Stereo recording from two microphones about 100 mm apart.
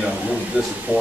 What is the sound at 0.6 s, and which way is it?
Speech, 15° right (ahead or behind).